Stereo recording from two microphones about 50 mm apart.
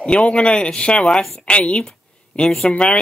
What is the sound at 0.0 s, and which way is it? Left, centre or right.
Speech, left.